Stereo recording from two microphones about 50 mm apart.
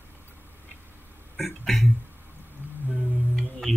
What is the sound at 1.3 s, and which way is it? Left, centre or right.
Speech, centre.